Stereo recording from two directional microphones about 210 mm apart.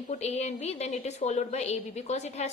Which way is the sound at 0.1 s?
30° left (ahead or behind).